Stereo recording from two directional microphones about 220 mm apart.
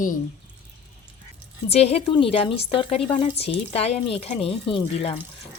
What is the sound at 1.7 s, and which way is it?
Speech, 30° left (ahead or behind).